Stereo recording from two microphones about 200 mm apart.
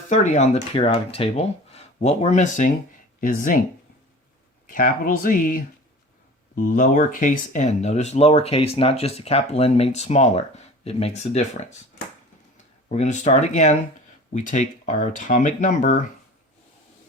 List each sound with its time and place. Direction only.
0.1 s speech: 35° left (ahead or behind)
4.6 s speech: 45° left (ahead or behind)
12.9 s speech: 35° left (ahead or behind)